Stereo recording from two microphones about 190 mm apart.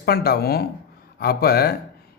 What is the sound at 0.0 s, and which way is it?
A man's voice, 55° left (ahead or behind).